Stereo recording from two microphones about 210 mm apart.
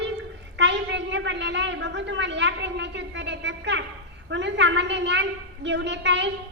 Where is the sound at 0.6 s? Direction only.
55° right (ahead or behind).